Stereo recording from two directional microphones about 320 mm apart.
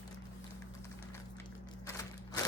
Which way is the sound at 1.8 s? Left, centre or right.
Centre.